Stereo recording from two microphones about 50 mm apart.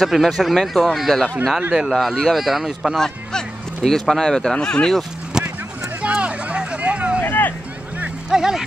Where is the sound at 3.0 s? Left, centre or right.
Centre.